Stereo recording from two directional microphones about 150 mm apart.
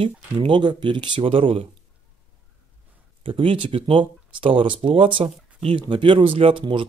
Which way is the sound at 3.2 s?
35° right (ahead or behind).